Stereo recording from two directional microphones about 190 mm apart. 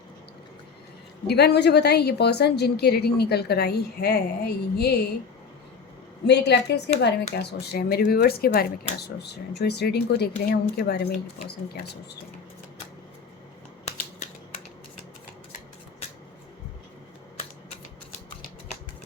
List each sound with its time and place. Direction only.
1.3 s a woman's voice: 60° left (ahead or behind)
6.2 s a woman's voice: 60° left (ahead or behind)